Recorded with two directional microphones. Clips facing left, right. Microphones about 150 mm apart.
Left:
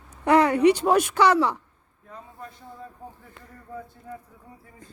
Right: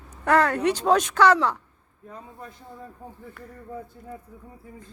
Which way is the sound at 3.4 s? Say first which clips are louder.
Right 6 dB; 20° left (ahead or behind).